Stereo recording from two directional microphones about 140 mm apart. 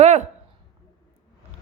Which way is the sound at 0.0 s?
55° right (ahead or behind).